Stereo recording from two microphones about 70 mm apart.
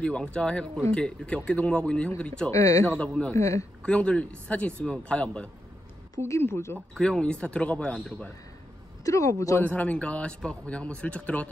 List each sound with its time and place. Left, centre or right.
0.0 s speech: centre
2.5 s speech: left
3.1 s speech: centre
3.3 s speech: left
3.8 s speech: centre
6.4 s speech: left
7.0 s speech: centre
9.0 s speech: left
9.6 s speech: left